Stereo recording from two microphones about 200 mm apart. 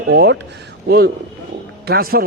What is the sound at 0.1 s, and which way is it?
A man's voice, 55° right (ahead or behind).